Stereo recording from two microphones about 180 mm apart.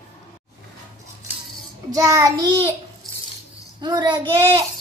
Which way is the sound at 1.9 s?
20° right (ahead or behind).